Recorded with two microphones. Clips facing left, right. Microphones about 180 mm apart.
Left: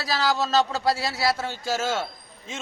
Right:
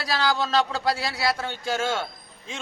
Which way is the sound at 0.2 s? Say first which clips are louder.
Left 1 dB; 5° left (ahead or behind).